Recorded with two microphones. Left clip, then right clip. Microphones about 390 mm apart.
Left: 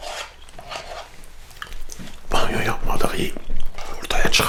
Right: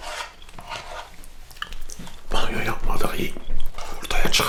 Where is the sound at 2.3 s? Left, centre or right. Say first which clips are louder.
Left 4 dB; left.